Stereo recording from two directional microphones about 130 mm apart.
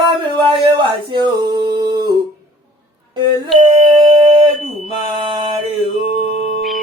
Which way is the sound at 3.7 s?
45° right (ahead or behind).